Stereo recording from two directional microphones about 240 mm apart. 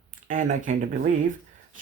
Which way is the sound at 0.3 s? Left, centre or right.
Right.